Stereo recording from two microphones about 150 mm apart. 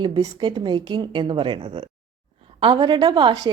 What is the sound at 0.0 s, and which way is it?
A woman's voice, 30° right (ahead or behind).